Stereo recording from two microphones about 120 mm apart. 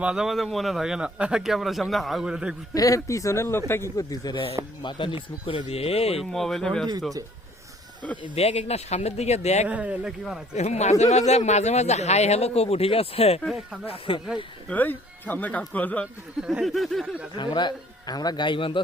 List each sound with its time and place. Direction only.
0.0 s speech: 5° right (ahead or behind)
2.7 s a man's voice: 25° left (ahead or behind)
4.8 s speech: 40° left (ahead or behind)
6.1 s speech: centre (ahead or behind)
8.4 s speech: 60° left (ahead or behind)
9.6 s speech: 10° right (ahead or behind)
10.5 s speech: 65° left (ahead or behind); by 14.2 s 50° left (ahead or behind)
14.7 s speech: 15° left (ahead or behind)
16.4 s speech: 5° right (ahead or behind)
17.3 s a man's voice: 40° left (ahead or behind)